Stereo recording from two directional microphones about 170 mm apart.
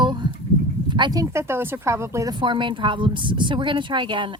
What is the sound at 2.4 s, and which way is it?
A woman's voice, 30° right (ahead or behind).